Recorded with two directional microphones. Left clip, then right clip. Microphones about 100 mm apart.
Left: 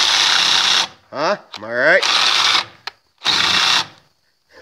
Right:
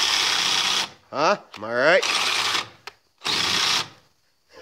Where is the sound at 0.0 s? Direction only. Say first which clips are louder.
Left 7 dB; 15° left (ahead or behind).